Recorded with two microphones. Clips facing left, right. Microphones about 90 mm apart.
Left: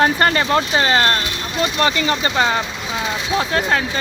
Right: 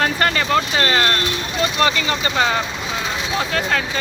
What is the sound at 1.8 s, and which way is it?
Speech, 30° left (ahead or behind).